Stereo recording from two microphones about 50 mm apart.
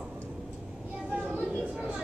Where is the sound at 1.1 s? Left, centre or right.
Right.